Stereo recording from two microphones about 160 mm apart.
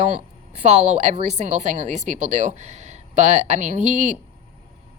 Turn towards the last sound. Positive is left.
turn(degrees=-50)  # may be behind; listen again after turning